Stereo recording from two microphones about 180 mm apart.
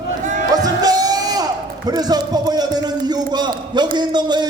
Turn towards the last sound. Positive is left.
turn(degrees=-25)  # may be behind; listen again after turning